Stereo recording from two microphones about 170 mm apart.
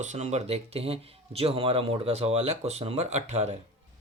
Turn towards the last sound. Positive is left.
turn(degrees=-40)  # may be behind; listen again after turning